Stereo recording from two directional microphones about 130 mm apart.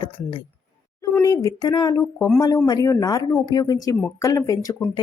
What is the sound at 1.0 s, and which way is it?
Speech, 25° left (ahead or behind).